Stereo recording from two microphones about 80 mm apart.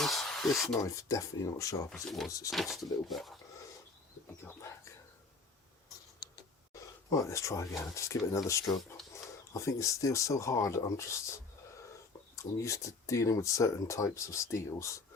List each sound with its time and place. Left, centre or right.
0.0 s a sound: centre
0.8 s speech: left
1.9 s speech: centre
4.4 s speech: left
7.1 s speech: left
12.4 s speech: left